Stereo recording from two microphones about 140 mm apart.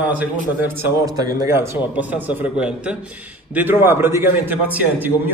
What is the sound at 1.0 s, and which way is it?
A man's voice, 25° right (ahead or behind).